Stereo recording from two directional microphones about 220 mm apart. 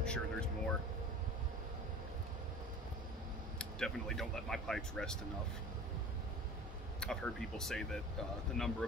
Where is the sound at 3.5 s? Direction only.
Centre (ahead or behind).